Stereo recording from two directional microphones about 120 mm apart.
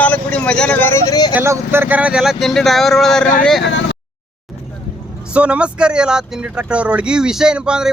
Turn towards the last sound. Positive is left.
turn(degrees=-5)  # may be behind; listen again after turning